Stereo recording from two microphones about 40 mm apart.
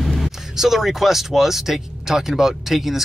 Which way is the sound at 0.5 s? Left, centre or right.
Centre.